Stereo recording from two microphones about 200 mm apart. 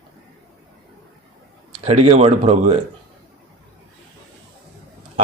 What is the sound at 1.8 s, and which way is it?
Speech, 30° right (ahead or behind).